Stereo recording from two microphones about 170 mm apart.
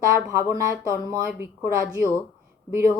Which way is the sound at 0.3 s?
15° right (ahead or behind).